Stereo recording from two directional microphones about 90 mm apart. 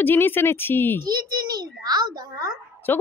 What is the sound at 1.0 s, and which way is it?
A child's voice, 45° right (ahead or behind).